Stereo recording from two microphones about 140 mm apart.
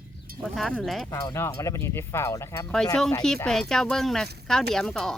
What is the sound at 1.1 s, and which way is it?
Speech, 20° left (ahead or behind).